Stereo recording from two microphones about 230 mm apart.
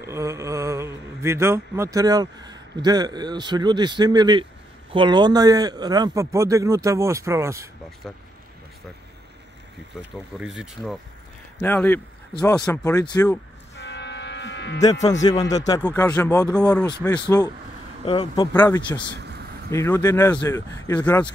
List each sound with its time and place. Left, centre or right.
0.0 s a man's voice: centre
8.0 s speech: centre
10.4 s speech: centre
13.7 s music: left
15.2 s speech: centre